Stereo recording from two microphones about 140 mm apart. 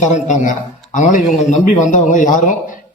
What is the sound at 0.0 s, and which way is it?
A man's voice, 60° left (ahead or behind).